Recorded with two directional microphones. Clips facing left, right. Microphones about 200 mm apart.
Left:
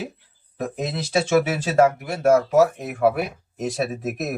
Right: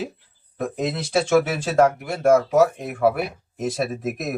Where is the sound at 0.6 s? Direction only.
5° left (ahead or behind).